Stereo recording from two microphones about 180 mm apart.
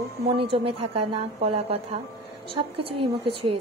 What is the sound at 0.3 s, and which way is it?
Speech, 30° right (ahead or behind).